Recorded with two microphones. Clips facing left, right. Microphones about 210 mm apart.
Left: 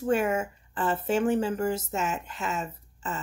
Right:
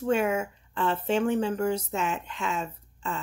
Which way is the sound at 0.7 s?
45° left (ahead or behind).